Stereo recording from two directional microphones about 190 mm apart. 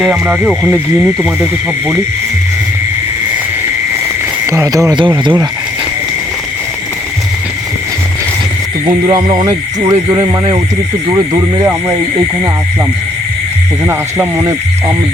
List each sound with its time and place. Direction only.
0.0 s speech: 5° right (ahead or behind)
4.5 s speech: 15° right (ahead or behind)
9.1 s speech: 20° right (ahead or behind)
11.1 s speech: 20° right (ahead or behind)
13.8 s speech: 15° right (ahead or behind)